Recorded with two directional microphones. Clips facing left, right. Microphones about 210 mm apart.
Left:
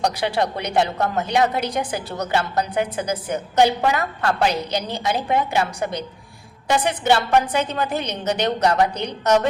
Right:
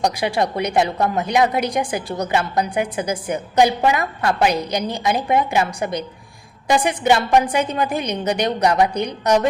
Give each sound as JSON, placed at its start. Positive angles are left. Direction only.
{"t": 0.0, "sound": "a woman's voice", "side_deg": -10}